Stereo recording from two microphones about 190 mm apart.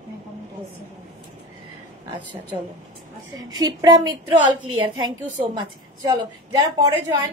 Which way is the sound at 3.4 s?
20° right (ahead or behind).